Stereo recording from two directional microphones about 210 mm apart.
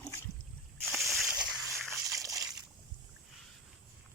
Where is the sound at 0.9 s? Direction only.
Centre (ahead or behind).